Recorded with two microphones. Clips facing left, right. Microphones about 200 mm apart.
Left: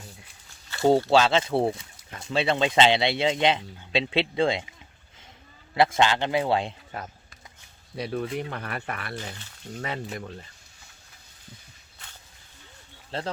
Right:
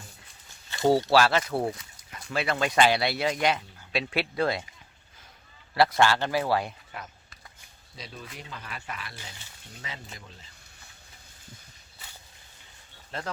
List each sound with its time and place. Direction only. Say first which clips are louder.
0.7 s a sound: left 3 dB; 15° right (ahead or behind)
1.1 s speech: left 2 dB; 25° left (ahead or behind)
5.7 s speech: left 1 dB; 20° left (ahead or behind)
7.9 s speech: left 14 dB; 60° left (ahead or behind)
13.1 s speech: left 4 dB; 30° left (ahead or behind)